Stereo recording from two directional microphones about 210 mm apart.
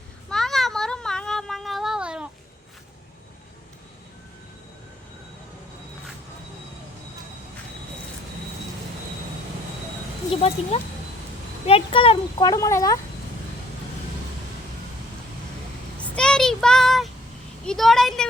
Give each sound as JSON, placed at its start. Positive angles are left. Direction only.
{"t": 0.3, "sound": "a sound", "side_deg": 0}
{"t": 10.7, "sound": "speech", "side_deg": 30}
{"t": 16.0, "sound": "child singing", "side_deg": 5}
{"t": 17.7, "sound": "vehicle", "side_deg": 0}